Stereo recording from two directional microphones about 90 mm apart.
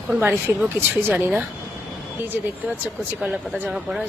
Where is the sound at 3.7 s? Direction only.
5° right (ahead or behind).